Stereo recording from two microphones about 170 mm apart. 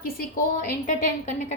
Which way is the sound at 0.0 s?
60° left (ahead or behind).